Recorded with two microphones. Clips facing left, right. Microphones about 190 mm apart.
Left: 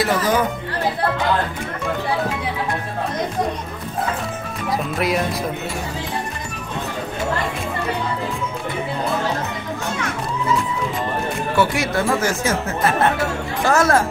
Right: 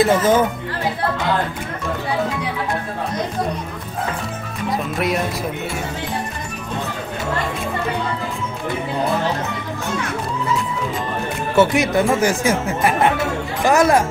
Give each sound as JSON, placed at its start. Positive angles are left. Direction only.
{"t": 0.0, "sound": "speech", "side_deg": -25}
{"t": 4.9, "sound": "speech", "side_deg": 0}
{"t": 11.5, "sound": "speech", "side_deg": -20}